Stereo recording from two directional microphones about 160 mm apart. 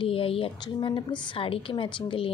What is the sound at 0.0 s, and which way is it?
A woman's voice, 35° left (ahead or behind).